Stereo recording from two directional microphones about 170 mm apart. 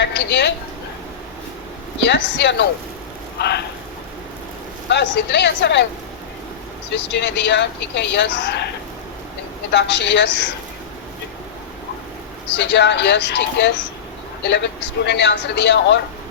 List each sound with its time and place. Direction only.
0.0 s speech: 85° left
2.0 s speech: 90° left
3.3 s speech: 75° left (ahead or behind)
4.9 s speech: 90° left
6.9 s speech: 90° left
9.7 s speech: 90° left
12.5 s speech: 90° left